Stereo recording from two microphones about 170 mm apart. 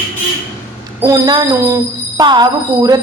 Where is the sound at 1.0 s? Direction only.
20° right (ahead or behind).